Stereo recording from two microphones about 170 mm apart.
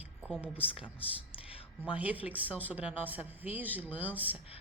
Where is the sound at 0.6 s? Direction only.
30° left (ahead or behind).